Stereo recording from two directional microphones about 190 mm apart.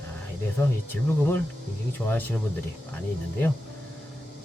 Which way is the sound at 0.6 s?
10° left (ahead or behind).